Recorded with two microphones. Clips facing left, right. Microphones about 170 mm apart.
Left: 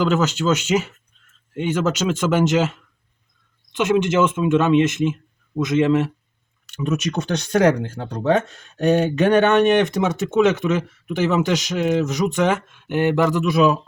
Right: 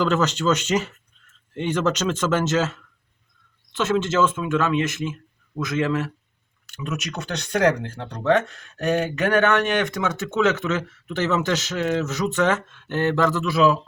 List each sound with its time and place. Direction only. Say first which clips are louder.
0.0 s speech: left 2 dB; 10° left (ahead or behind)